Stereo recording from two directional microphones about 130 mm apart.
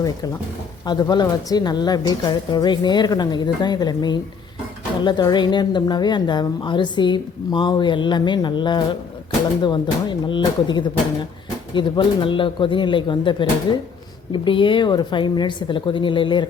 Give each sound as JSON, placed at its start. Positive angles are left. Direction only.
{"t": 0.9, "sound": "speech", "side_deg": 30}